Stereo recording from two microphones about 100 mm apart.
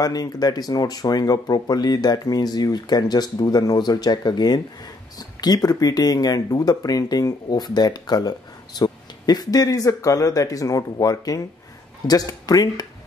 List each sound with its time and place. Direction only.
0.0 s speech: 40° left (ahead or behind)